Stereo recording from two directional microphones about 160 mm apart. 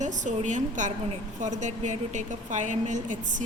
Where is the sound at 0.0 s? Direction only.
50° right (ahead or behind).